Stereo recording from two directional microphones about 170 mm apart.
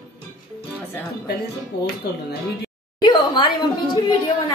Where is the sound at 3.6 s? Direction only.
25° left (ahead or behind).